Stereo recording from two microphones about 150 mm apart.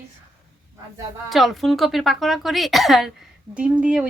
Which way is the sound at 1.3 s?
Centre (ahead or behind).